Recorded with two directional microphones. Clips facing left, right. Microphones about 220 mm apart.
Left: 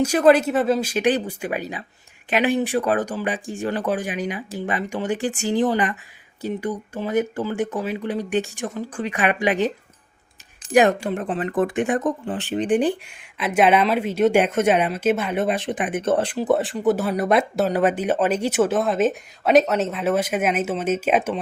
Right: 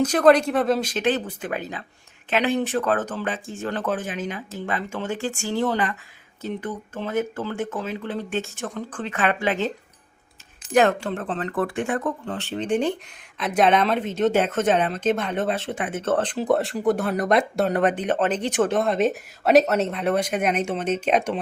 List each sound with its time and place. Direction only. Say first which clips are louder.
0.0 s speech: left 1 dB; 10° left (ahead or behind)